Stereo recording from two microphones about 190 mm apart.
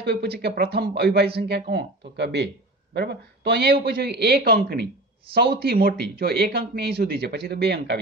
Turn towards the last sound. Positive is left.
turn(degrees=-60)  # may be behind; listen again after turning